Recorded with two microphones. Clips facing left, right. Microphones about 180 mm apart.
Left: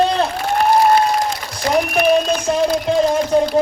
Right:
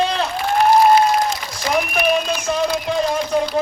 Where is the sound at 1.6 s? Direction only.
30° left (ahead or behind).